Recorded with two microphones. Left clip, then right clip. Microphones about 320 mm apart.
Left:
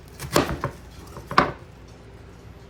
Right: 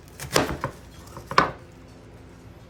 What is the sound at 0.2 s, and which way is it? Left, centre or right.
Chopping, centre.